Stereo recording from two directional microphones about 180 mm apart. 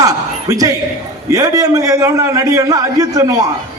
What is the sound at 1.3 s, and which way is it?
A man's voice, 20° right (ahead or behind).